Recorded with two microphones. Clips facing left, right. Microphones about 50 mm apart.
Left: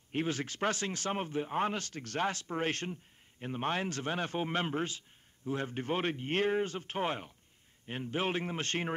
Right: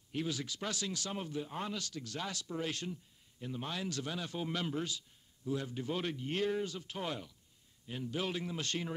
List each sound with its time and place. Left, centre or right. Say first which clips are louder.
0.1 s speech: left 4 dB; left